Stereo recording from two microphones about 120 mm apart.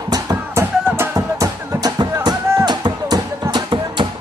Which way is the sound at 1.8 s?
35° right (ahead or behind).